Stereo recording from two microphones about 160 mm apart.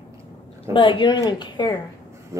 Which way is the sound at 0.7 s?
30° left (ahead or behind).